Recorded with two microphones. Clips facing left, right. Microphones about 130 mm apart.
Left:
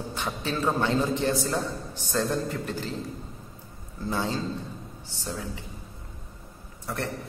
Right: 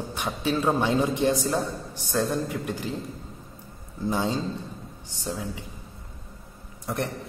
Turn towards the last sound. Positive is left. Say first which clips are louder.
# right 3 dB
turn(degrees=-20)  # may be behind; listen again after turning